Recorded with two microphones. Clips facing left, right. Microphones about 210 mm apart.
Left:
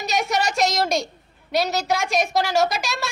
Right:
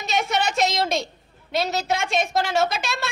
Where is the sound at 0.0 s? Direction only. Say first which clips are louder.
Left 1 dB; centre (ahead or behind).